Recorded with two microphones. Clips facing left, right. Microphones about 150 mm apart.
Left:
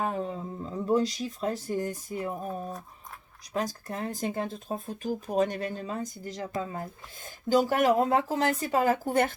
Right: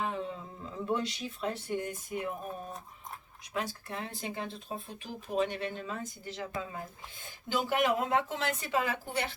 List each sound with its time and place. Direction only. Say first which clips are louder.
0.0 s speech: left 5 dB; 40° left (ahead or behind)
3.5 s speech: left 5 dB; 40° left (ahead or behind)